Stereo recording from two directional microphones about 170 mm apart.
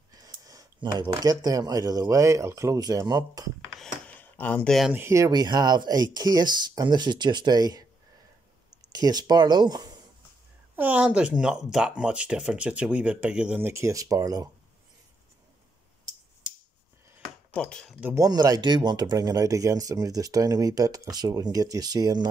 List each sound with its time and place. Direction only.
0.1 s a sound: 20° right (ahead or behind)
1.2 s speech: 20° right (ahead or behind)
3.7 s a sound: 5° left (ahead or behind)
4.7 s speech: 5° right (ahead or behind)
5.0 s speech: 15° right (ahead or behind)
8.9 s speech: 25° right (ahead or behind)
10.8 s speech: 10° right (ahead or behind)
17.6 s speech: 5° left (ahead or behind)
18.1 s speech: 20° right (ahead or behind)